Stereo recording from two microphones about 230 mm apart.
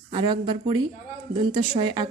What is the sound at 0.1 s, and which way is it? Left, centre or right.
A woman's voice, right.